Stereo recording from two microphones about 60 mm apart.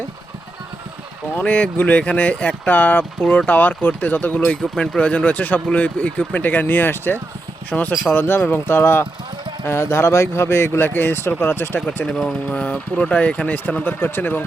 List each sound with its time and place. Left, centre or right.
1.4 s speech: left
10.8 s speech: left
12.0 s speech: centre
12.5 s speech: left